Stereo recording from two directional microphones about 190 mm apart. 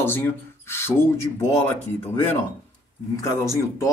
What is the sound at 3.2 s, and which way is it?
Speech, 15° left (ahead or behind).